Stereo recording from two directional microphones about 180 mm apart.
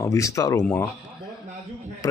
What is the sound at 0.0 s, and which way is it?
Speech, 20° left (ahead or behind).